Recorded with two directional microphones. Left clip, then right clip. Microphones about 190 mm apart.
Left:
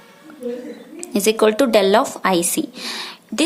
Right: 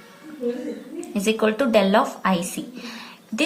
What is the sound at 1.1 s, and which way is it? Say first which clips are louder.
A woman's voice: left 6 dB; 45° left (ahead or behind).